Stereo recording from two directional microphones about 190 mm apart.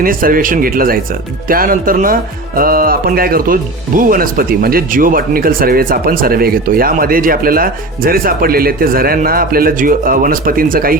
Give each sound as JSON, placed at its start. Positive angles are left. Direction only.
{"t": 0.0, "sound": "speech", "side_deg": -50}